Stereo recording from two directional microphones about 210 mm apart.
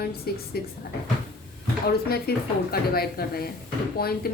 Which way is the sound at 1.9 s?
45° left (ahead or behind).